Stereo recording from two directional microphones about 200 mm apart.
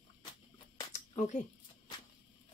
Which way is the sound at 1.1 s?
35° left (ahead or behind).